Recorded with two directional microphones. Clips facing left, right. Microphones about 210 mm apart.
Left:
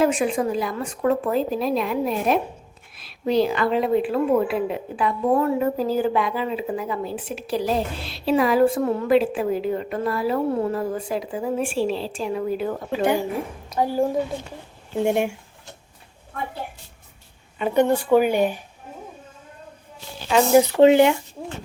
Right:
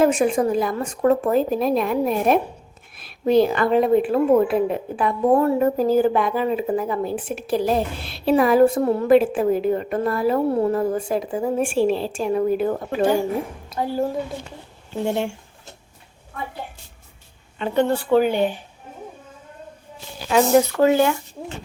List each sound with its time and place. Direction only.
0.0 s a woman's voice: 45° right (ahead or behind)
9.0 s a woman's voice: 50° right (ahead or behind)
13.7 s a woman's voice: 15° left (ahead or behind)
15.0 s a woman's voice: 10° left (ahead or behind)
17.6 s a woman's voice: 15° left (ahead or behind)
20.6 s speech: 20° left (ahead or behind)